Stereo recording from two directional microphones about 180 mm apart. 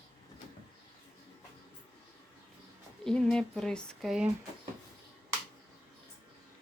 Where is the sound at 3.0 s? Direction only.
5° left (ahead or behind).